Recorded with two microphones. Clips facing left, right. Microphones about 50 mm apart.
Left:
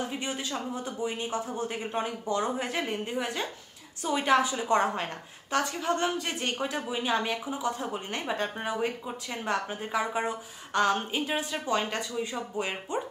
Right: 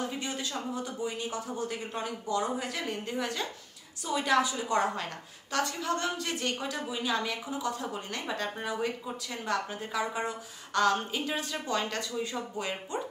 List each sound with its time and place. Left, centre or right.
0.2 s a woman's voice: left